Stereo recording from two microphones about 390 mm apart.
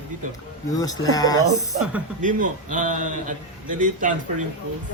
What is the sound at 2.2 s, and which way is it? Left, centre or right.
A man's voice, centre.